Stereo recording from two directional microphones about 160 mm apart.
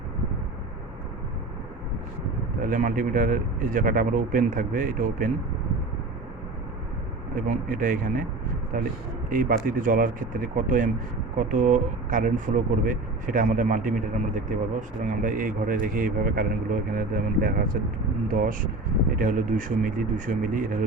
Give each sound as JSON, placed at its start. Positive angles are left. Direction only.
{"t": 2.6, "sound": "a man's voice", "side_deg": -55}
{"t": 7.4, "sound": "a man's voice", "side_deg": -55}